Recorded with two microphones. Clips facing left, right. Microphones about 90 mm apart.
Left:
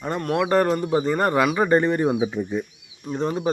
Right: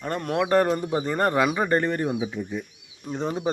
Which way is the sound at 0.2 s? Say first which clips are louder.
Left 1 dB; 5° right (ahead or behind).